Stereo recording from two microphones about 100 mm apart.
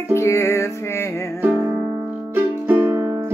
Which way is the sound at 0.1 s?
30° left (ahead or behind).